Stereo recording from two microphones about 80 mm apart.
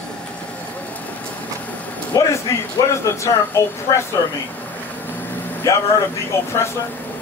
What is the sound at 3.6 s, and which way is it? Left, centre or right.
Speech, left.